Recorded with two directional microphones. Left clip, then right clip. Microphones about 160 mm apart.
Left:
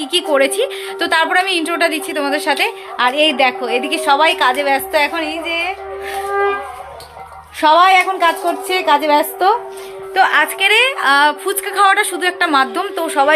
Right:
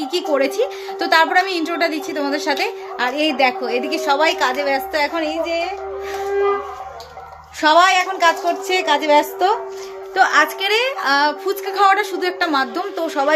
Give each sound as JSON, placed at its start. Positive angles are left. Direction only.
{"t": 0.0, "sound": "a woman's voice", "side_deg": 0}
{"t": 7.6, "sound": "speech", "side_deg": 35}
{"t": 10.2, "sound": "a woman's voice", "side_deg": 10}